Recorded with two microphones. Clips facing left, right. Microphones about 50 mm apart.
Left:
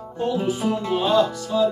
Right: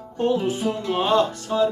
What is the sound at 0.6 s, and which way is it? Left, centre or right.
Speech, centre.